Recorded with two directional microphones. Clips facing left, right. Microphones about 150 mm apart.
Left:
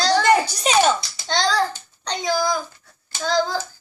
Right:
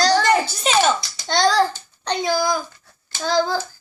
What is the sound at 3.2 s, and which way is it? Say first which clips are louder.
Speech: right 1 dB; 5° right (ahead or behind).